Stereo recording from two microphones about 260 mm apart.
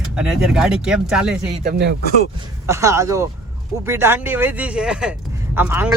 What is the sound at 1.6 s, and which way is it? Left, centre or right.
Speech, right.